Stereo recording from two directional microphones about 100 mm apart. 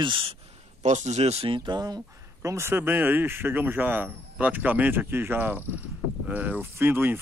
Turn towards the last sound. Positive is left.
turn(degrees=-20)  # may be behind; listen again after turning